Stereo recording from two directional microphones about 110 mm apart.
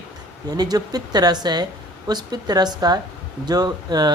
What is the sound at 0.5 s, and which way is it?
Speech, 35° right (ahead or behind).